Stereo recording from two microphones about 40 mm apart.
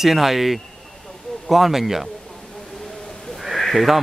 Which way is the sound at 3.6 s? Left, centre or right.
Centre.